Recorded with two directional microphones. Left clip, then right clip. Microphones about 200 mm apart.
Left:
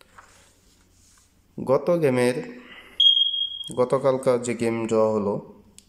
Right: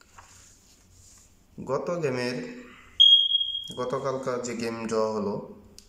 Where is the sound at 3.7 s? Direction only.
30° left (ahead or behind).